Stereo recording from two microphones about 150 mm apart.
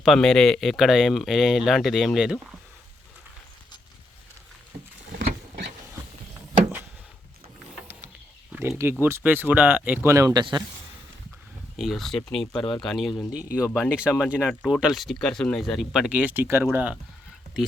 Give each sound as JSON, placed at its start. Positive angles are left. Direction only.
{"t": 0.0, "sound": "speech", "side_deg": 0}
{"t": 8.8, "sound": "speech", "side_deg": -15}
{"t": 11.8, "sound": "speech", "side_deg": 0}